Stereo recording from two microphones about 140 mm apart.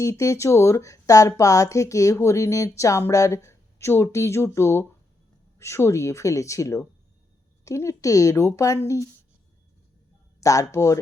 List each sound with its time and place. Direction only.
0.0 s speech: 20° left (ahead or behind)
10.4 s speech: 25° left (ahead or behind)